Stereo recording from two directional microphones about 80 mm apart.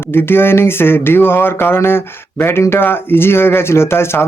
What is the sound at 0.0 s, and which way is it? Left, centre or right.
Speech, left.